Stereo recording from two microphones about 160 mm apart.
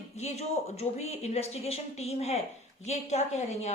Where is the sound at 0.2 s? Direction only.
45° left (ahead or behind).